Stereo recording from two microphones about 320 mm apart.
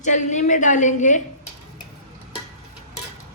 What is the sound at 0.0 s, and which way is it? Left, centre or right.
Speech, left.